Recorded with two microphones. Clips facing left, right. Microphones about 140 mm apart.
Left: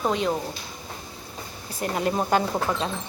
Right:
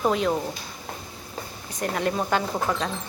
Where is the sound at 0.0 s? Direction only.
Centre (ahead or behind).